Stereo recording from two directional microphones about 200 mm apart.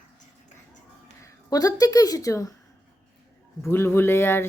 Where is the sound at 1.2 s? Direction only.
15° left (ahead or behind).